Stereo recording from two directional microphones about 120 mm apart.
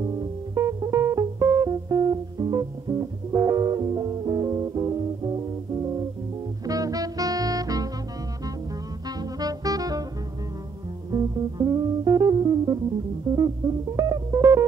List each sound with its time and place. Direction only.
0.0 s music: 35° right (ahead or behind)
9.2 s music: 30° right (ahead or behind)
11.1 s music: 30° right (ahead or behind)
13.9 s music: 30° right (ahead or behind)